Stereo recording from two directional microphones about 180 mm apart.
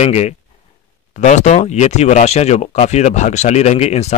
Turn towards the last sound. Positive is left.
turn(degrees=35)  # may be behind; listen again after turning